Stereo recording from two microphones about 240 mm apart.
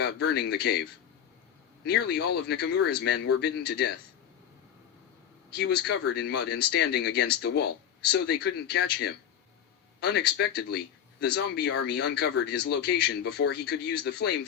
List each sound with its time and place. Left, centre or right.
0.0 s speech: left
5.5 s speech: left